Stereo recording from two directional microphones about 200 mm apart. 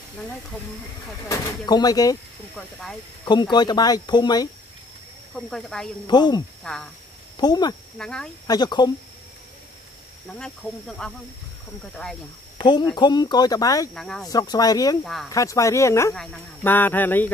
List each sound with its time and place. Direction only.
1.3 s speech: 20° left (ahead or behind)
2.5 s speech: 5° left (ahead or behind)
3.3 s speech: 20° left (ahead or behind)
5.3 s speech: centre (ahead or behind)
6.0 s speech: 20° left (ahead or behind)
6.6 s speech: 5° left (ahead or behind)
7.3 s speech: 20° left (ahead or behind)
8.0 s speech: 5° left (ahead or behind)
8.5 s speech: 20° left (ahead or behind)
10.4 s speech: 5° left (ahead or behind)
12.5 s speech: 20° left (ahead or behind)
13.9 s speech: 5° left (ahead or behind)
14.3 s speech: 20° left (ahead or behind)